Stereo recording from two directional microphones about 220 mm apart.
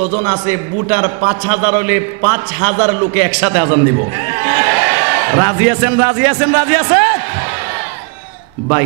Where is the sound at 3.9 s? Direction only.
15° right (ahead or behind).